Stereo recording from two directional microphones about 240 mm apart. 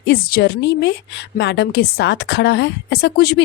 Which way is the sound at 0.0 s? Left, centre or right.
Left.